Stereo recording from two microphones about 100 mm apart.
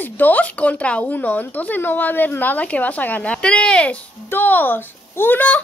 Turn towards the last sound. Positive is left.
turn(degrees=15)  # may be behind; listen again after turning